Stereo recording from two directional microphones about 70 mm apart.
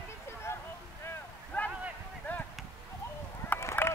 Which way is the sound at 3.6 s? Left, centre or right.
Left.